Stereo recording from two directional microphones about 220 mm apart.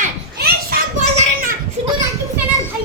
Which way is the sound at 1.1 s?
40° right (ahead or behind).